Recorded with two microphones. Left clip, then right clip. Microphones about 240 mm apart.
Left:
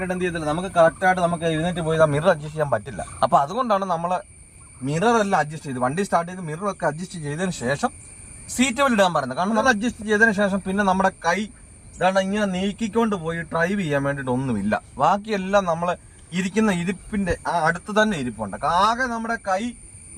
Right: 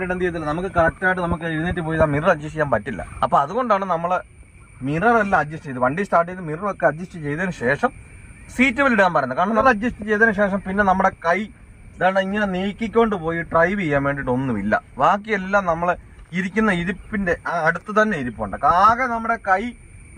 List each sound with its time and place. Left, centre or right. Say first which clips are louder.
0.1 s a man's voice: right 1 dB; centre